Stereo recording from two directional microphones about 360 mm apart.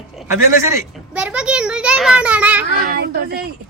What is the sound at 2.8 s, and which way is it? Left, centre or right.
Speech, right.